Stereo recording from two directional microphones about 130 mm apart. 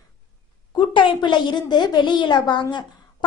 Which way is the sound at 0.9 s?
40° left (ahead or behind).